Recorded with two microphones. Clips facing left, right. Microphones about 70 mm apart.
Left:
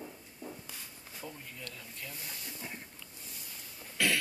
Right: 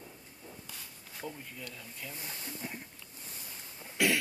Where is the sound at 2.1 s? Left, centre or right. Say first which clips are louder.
Right 2 dB; right.